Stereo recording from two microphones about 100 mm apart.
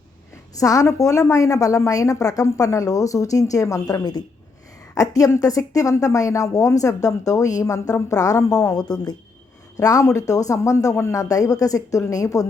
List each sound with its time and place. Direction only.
0.5 s speech: 35° left (ahead or behind)